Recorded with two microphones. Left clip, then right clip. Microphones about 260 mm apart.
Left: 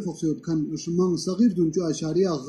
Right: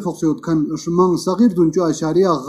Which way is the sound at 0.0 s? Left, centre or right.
Right.